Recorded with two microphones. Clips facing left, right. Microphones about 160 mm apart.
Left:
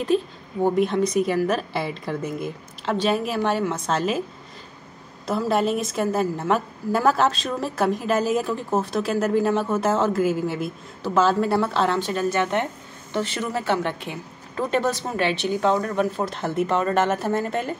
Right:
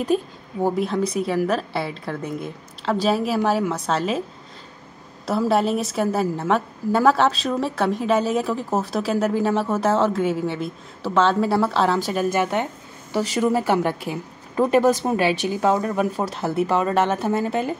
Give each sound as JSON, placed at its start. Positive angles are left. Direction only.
{"t": 0.1, "sound": "a woman's voice", "side_deg": -45}
{"t": 0.6, "sound": "a woman's voice", "side_deg": -5}
{"t": 5.2, "sound": "a woman's voice", "side_deg": 0}